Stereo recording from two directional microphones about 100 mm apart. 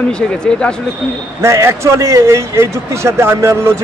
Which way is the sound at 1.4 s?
30° right (ahead or behind).